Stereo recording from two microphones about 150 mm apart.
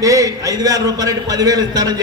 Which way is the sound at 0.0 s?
20° right (ahead or behind).